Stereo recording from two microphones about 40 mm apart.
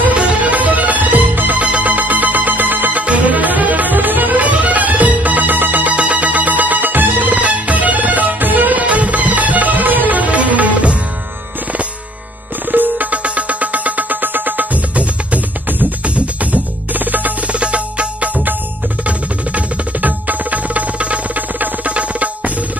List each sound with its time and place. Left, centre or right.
0.2 s music: right
1.6 s music: right
3.0 s music: right
5.9 s music: right
8.8 s music: right
12.7 s music: right
16.9 s music: right
17.5 s music: right